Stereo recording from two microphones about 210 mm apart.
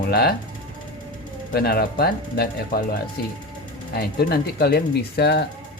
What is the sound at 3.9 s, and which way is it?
Speech, 50° left (ahead or behind).